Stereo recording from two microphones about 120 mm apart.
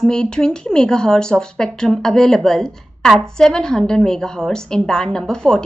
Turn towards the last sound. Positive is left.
turn(degrees=5)  # may be behind; listen again after turning